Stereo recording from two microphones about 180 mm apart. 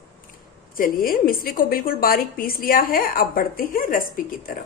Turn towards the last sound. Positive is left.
turn(degrees=50)  # may be behind; listen again after turning